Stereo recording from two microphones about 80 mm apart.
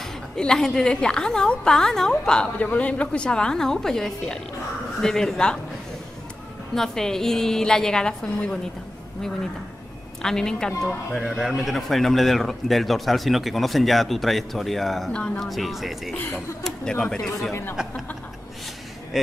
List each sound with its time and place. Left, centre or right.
0.4 s a woman's voice: centre
6.7 s a woman's voice: centre
10.2 s a woman's voice: centre
17.5 s speech: left